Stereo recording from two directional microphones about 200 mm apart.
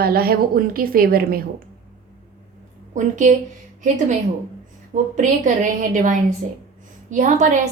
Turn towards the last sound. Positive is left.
turn(degrees=-40)  # may be behind; listen again after turning